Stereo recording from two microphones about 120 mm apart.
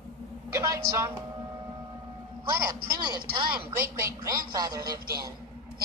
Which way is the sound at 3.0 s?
35° right (ahead or behind).